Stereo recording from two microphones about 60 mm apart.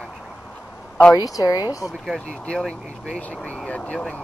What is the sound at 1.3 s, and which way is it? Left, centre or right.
Speech, left.